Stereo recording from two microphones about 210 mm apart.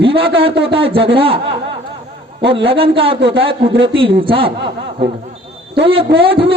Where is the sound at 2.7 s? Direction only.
25° right (ahead or behind).